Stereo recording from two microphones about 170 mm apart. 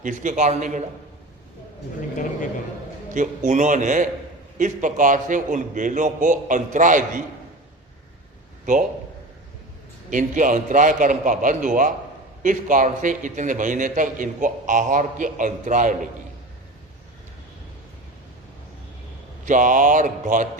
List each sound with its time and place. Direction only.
0.0 s a man's voice: 50° right (ahead or behind)
3.2 s a man's voice: 45° right (ahead or behind)
10.1 s a man's voice: 50° right (ahead or behind)
19.5 s a man's voice: 50° right (ahead or behind)